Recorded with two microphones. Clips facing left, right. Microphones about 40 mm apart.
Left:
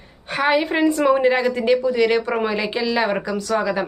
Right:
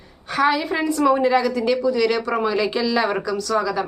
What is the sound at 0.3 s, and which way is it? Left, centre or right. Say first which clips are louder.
Speech: left 1 dB; left.